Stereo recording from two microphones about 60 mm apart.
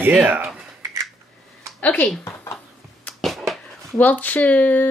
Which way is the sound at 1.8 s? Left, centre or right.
Left.